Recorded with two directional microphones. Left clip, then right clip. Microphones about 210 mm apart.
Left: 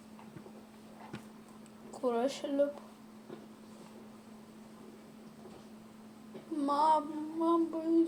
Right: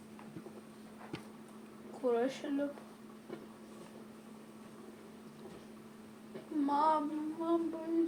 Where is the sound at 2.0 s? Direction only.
55° left (ahead or behind).